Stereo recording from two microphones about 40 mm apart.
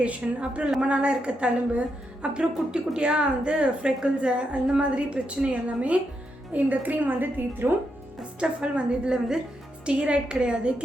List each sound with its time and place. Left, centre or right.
0.0 s a woman's voice: right
6.5 s a woman's voice: right
8.4 s a woman's voice: right